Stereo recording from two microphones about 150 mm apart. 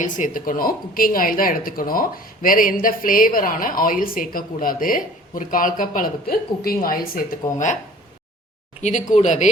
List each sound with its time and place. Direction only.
0.0 s a woman's voice: 60° left (ahead or behind); by 7.3 s 75° left (ahead or behind)
8.8 s speech: 55° left (ahead or behind)